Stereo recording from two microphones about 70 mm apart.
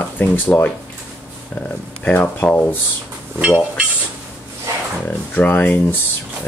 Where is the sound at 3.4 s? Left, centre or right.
Centre.